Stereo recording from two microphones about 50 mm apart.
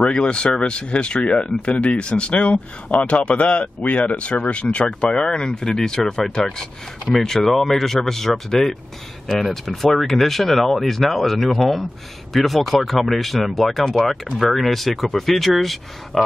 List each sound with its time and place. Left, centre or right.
0.1 s speech: centre